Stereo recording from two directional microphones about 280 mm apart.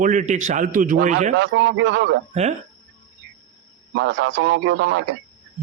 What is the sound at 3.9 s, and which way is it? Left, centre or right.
A man's voice, right.